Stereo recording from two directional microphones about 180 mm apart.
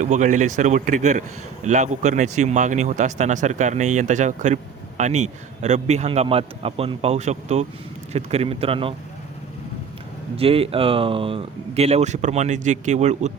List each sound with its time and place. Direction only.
0.0 s speech: 45° right (ahead or behind)
10.3 s speech: 30° right (ahead or behind)